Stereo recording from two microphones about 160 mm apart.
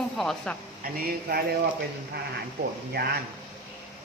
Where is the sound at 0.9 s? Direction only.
70° right (ahead or behind).